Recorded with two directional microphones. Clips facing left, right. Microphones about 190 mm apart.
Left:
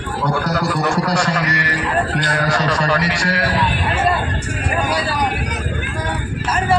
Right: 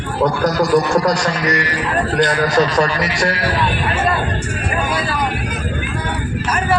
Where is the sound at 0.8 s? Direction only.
35° right (ahead or behind).